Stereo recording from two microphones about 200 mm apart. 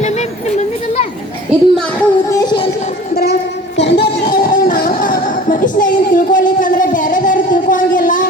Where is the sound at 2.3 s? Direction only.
20° left (ahead or behind).